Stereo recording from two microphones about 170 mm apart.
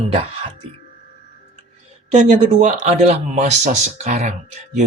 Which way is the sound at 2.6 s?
40° right (ahead or behind).